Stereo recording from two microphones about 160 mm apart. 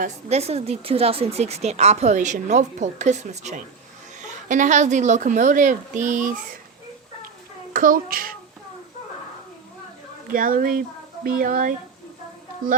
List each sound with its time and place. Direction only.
0.3 s speech: 40° right (ahead or behind)
7.7 s a child's voice: 60° right (ahead or behind)
10.3 s speech: 60° right (ahead or behind)